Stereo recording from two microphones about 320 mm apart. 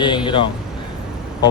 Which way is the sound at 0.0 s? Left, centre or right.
Centre.